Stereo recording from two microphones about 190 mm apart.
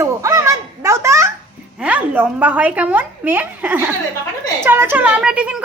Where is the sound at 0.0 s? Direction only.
15° right (ahead or behind).